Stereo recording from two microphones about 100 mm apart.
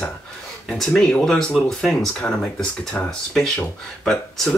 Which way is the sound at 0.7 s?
5° left (ahead or behind).